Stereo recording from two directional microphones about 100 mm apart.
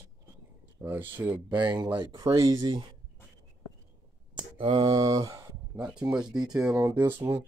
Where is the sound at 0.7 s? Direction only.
20° right (ahead or behind).